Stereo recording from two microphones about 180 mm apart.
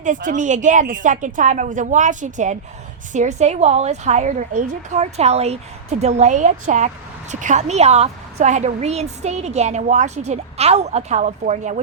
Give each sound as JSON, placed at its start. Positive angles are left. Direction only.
{"t": 0.0, "sound": "a woman's voice", "side_deg": -45}